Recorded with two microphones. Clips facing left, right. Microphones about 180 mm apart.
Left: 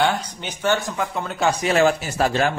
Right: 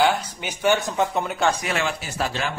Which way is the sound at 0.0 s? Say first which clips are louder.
Right 1 dB; 5° right (ahead or behind).